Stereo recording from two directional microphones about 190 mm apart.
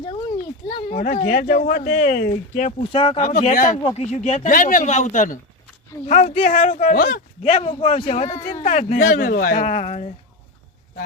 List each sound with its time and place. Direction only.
0.9 s speech: 45° left (ahead or behind)
2.9 s speech: 30° left (ahead or behind)
3.2 s speech: 40° left (ahead or behind)
7.4 s speech: 35° left (ahead or behind)